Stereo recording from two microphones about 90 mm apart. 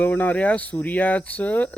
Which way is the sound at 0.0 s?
20° left (ahead or behind).